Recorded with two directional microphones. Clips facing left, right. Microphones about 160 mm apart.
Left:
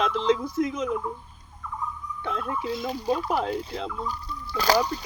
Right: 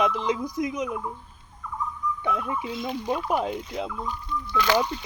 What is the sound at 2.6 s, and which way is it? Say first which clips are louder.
Speech: left 2 dB; 35° left (ahead or behind).